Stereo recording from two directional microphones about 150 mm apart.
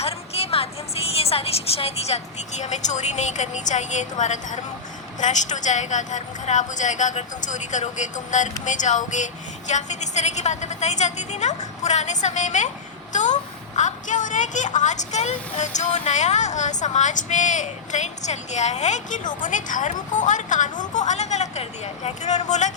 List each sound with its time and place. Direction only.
0.0 s a woman's voice: 40° left (ahead or behind)